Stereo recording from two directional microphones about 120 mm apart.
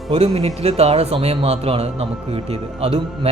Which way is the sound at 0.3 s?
55° right (ahead or behind).